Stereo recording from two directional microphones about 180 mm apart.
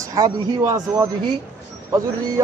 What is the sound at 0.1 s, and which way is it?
A man's voice, 20° right (ahead or behind).